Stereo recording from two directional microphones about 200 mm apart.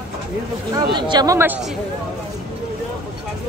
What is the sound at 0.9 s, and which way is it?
Speech, 20° right (ahead or behind).